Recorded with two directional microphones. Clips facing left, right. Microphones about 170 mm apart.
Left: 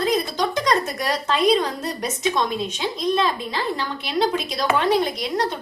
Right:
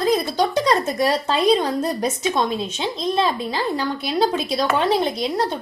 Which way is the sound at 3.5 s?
40° right (ahead or behind).